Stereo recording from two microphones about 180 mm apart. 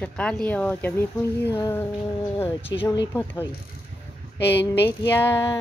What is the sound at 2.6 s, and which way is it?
Speech, 30° left (ahead or behind).